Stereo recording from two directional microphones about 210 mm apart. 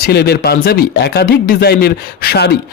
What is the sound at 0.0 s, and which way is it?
Speech, 50° left (ahead or behind).